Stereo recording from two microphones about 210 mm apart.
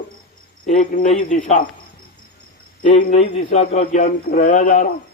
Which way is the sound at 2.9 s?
25° left (ahead or behind).